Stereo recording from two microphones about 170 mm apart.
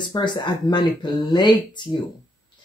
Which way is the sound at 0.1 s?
25° left (ahead or behind).